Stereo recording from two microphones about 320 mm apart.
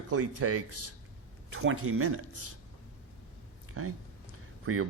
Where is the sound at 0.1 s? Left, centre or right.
Right.